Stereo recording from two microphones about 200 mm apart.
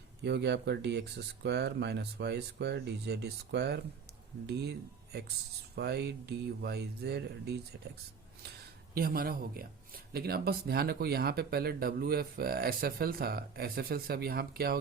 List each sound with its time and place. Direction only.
0.2 s speech: 60° right (ahead or behind)
5.7 s speech: 55° right (ahead or behind)
9.0 s speech: 50° right (ahead or behind)